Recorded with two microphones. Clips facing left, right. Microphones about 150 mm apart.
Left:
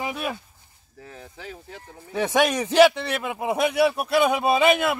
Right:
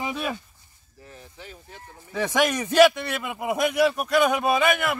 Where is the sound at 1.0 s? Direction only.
90° left.